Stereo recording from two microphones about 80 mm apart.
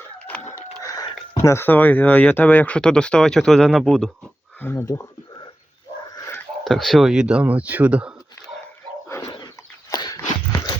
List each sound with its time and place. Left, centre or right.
0.8 s a sound: left
1.4 s speech: left; by 4.1 s centre
4.7 s speech: left
6.7 s speech: centre
9.0 s dog: left
9.9 s a sound: left